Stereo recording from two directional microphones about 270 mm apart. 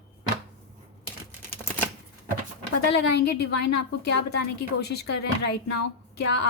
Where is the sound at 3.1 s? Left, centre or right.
Left.